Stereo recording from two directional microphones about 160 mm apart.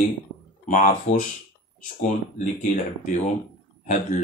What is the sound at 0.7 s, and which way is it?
Speech, 55° left (ahead or behind).